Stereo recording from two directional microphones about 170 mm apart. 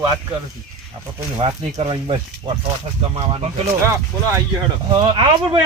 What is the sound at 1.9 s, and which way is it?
Speech, 25° right (ahead or behind).